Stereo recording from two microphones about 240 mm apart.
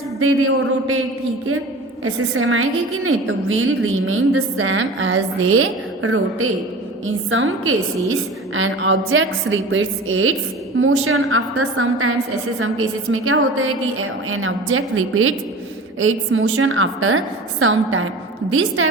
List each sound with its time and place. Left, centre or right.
0.2 s a woman's voice: right
2.0 s a woman's voice: right